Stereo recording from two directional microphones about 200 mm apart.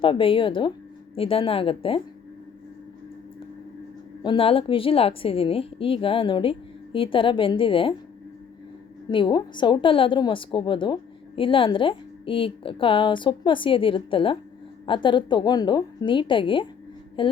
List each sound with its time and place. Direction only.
0.0 s a woman's voice: 25° left (ahead or behind)
4.2 s a woman's voice: 25° left (ahead or behind)
9.0 s a woman's voice: 25° left (ahead or behind)